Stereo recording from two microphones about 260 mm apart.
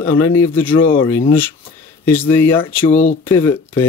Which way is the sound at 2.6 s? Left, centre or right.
Left.